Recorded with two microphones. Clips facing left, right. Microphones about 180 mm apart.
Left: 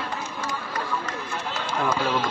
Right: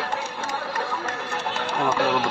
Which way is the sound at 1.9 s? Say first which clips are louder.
Right 3 dB; 70° right (ahead or behind).